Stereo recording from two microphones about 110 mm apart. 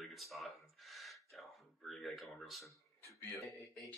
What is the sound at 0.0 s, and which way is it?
Gasp, centre (ahead or behind).